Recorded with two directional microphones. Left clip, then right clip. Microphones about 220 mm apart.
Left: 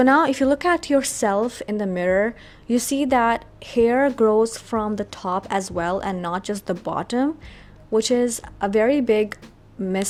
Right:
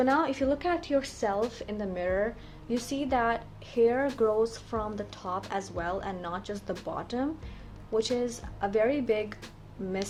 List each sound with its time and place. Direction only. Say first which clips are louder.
0.0 s a woman's voice: left 9 dB; 45° left (ahead or behind)